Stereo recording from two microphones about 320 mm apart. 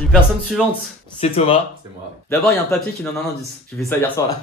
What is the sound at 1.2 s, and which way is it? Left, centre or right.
Speech, centre.